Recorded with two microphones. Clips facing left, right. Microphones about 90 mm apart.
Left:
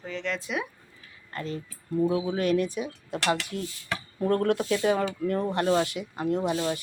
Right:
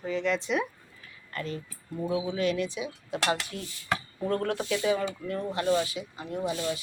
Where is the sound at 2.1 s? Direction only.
50° left (ahead or behind).